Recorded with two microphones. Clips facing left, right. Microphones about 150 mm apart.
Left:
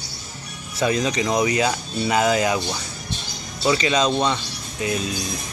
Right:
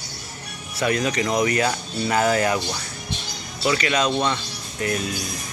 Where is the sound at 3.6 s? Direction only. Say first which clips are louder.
Left 2 dB; 20° left (ahead or behind).